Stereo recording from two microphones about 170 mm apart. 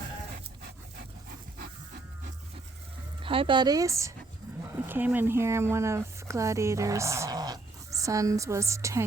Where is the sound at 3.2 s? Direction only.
30° right (ahead or behind).